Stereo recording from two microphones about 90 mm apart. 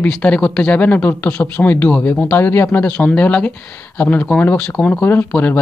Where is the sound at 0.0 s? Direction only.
10° left (ahead or behind).